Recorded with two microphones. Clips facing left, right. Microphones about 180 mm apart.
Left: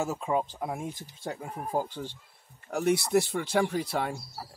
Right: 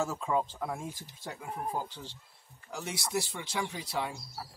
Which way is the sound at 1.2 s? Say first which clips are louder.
Left 2 dB; 40° left (ahead or behind).